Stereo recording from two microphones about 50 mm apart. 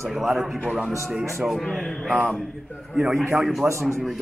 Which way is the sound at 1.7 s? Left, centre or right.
Centre.